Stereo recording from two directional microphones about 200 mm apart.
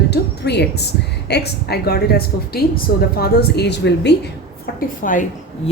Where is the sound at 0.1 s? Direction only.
55° left (ahead or behind).